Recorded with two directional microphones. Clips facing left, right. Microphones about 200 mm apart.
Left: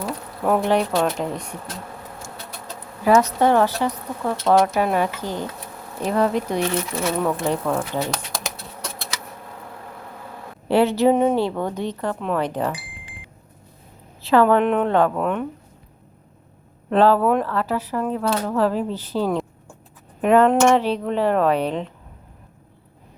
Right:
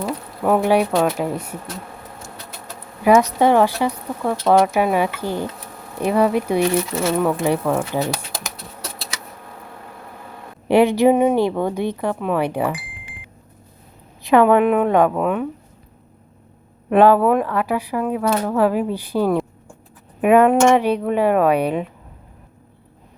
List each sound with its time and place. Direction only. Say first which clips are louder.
0.0 s speech: right 2 dB; 5° right (ahead or behind)
3.0 s speech: right 2 dB; 15° right (ahead or behind)
7.4 s speech: right 3 dB; 15° right (ahead or behind)
10.7 s speech: right 3 dB; 15° right (ahead or behind)
14.2 s speech: right 3 dB; 15° right (ahead or behind)
16.9 s speech: right 3 dB; 15° right (ahead or behind)